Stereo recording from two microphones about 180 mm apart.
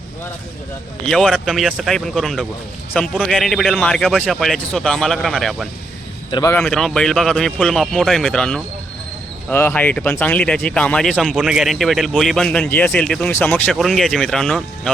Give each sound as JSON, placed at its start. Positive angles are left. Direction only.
{"t": 1.0, "sound": "speech", "side_deg": 5}
{"t": 6.3, "sound": "a man's voice", "side_deg": 20}
{"t": 6.6, "sound": "speech", "side_deg": 5}